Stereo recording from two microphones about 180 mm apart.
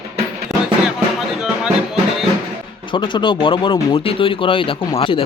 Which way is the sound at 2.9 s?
25° left (ahead or behind).